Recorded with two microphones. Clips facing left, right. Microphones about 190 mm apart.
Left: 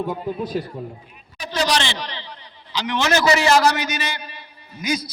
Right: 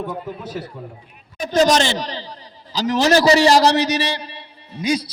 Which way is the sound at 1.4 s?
45° right (ahead or behind).